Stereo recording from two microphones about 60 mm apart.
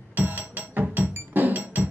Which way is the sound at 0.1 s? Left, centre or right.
Right.